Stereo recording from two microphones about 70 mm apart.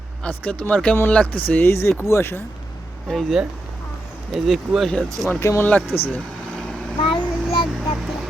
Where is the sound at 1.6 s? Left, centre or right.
Left.